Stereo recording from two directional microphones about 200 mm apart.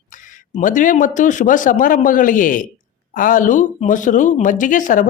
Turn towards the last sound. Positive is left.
turn(degrees=40)  # may be behind; listen again after turning